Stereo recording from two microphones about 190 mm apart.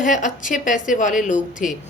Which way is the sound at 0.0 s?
40° left (ahead or behind).